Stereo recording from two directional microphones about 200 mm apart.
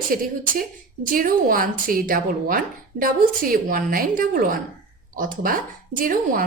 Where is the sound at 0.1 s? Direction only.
45° right (ahead or behind).